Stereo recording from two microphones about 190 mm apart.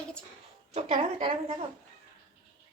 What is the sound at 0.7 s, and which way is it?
Speech, 30° right (ahead or behind).